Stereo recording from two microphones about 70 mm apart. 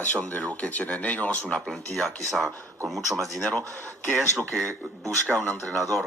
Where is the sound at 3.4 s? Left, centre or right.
Left.